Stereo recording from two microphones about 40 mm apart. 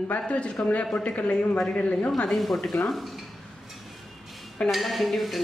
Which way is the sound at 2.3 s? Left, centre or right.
Centre.